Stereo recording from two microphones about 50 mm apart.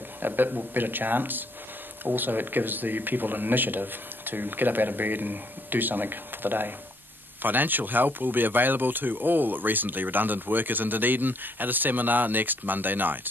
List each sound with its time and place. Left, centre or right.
0.2 s speech: right